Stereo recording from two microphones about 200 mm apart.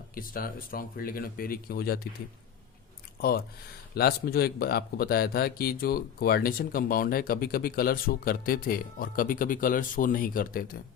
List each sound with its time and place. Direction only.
0.1 s speech: 45° left (ahead or behind)
3.2 s speech: 50° left (ahead or behind)